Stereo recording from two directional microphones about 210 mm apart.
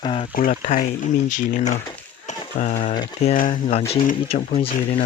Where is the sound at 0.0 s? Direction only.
25° left (ahead or behind).